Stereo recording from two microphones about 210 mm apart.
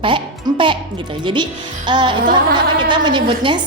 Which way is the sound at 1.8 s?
20° right (ahead or behind).